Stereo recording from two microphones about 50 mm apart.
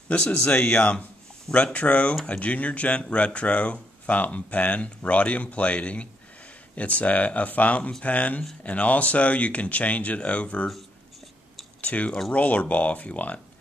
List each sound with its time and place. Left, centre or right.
0.1 s speech: left
11.8 s speech: left